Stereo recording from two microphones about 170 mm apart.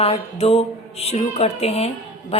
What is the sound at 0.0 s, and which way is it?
A woman's voice, 35° left (ahead or behind).